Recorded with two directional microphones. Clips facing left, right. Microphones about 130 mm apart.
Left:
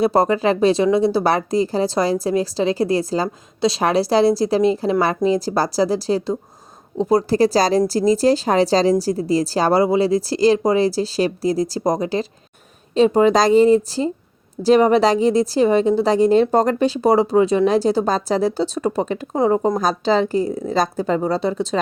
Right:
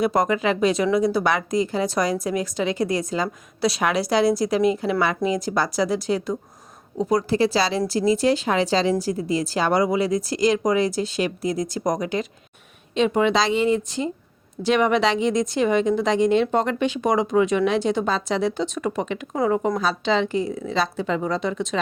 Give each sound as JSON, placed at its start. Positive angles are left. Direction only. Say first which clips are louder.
{"t": 0.0, "sound": "speech", "louder": "left 4 dB", "side_deg": 30}